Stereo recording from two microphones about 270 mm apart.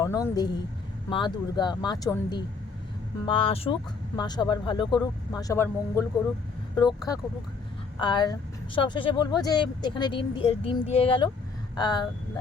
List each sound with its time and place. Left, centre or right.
0.0 s speech: centre